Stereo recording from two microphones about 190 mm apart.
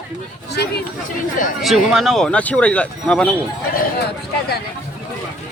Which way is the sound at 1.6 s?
Centre (ahead or behind).